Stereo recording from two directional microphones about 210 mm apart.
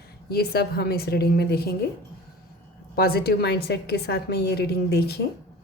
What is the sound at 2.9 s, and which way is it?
A woman's voice, 45° left (ahead or behind).